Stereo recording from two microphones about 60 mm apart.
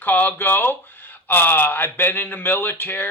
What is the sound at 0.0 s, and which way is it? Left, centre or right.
A man's voice, left.